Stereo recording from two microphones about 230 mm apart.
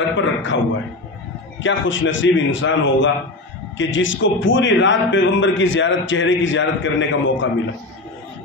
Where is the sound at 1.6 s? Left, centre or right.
Left.